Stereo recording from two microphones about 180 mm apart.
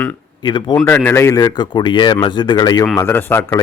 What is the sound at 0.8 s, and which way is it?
A man's voice, 10° left (ahead or behind).